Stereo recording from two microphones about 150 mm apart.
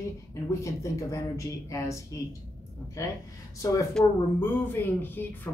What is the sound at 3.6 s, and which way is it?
Speech, 20° left (ahead or behind).